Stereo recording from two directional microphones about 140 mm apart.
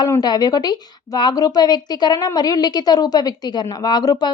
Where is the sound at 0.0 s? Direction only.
30° left (ahead or behind).